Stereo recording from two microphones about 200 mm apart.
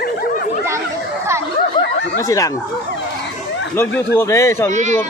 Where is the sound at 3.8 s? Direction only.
10° left (ahead or behind).